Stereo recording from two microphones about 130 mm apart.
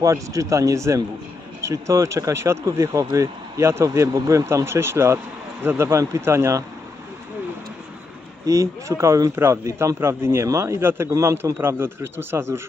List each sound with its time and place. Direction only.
0.0 s speech: 25° right (ahead or behind)
8.4 s speech: 25° right (ahead or behind)